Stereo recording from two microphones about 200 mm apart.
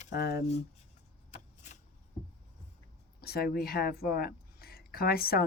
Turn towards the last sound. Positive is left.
turn(degrees=50)  # may be behind; listen again after turning